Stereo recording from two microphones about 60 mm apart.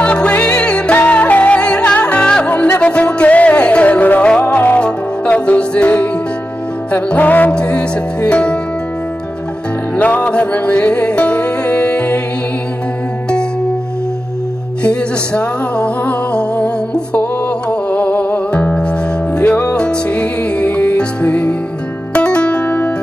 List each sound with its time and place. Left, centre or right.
0.0 s music: centre
0.9 s music: left
7.5 s music: centre
9.9 s music: left
14.8 s music: centre